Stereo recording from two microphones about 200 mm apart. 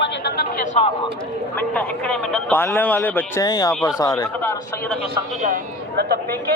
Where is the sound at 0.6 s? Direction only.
35° left (ahead or behind).